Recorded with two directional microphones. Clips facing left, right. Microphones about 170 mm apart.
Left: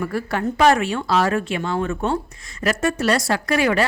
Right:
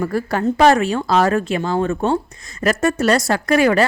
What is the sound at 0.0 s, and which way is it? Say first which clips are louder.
A woman's voice: right 4 dB; 40° right (ahead or behind).